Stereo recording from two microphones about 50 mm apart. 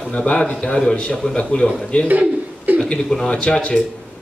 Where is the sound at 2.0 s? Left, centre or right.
Right.